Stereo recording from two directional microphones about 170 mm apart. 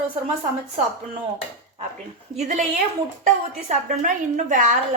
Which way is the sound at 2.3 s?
45° right (ahead or behind).